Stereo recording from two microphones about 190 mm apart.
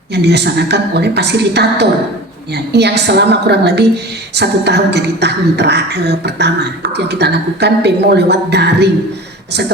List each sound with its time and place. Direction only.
0.1 s a woman's voice: 60° right (ahead or behind)